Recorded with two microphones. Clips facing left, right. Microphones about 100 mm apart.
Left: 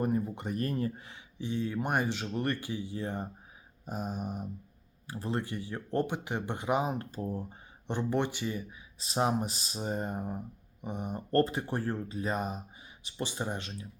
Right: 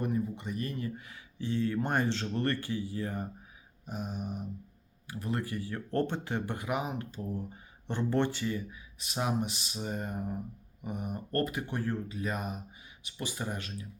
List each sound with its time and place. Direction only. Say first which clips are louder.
0.0 s speech: left 2 dB; 45° left (ahead or behind)
0.9 s speech: right 1 dB; 30° left (ahead or behind)
1.4 s speech: right 2 dB; 15° left (ahead or behind)
3.8 s speech: left 2 dB; 40° left (ahead or behind)
5.0 s speech: left 1 dB; 30° left (ahead or behind)
7.9 s speech: right 1 dB; 15° left (ahead or behind)
9.0 s speech: left 3 dB; 30° left (ahead or behind)